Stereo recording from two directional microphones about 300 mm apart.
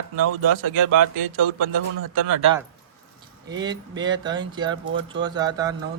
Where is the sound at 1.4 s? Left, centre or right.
Right.